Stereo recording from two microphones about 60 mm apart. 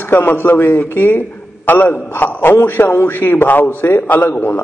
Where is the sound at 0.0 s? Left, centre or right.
Left.